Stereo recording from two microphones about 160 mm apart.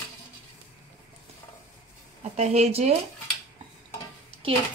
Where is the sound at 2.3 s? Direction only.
40° right (ahead or behind).